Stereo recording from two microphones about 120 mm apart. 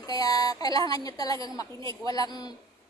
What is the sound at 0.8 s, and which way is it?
A woman's voice, 30° left (ahead or behind).